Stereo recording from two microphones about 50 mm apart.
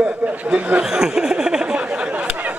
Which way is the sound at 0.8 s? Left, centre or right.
Centre.